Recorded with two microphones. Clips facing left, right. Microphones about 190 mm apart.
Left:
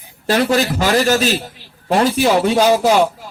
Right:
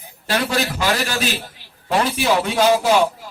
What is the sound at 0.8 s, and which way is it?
A man's voice, 40° left (ahead or behind).